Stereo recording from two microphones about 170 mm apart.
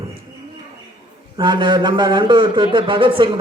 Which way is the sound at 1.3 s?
25° right (ahead or behind).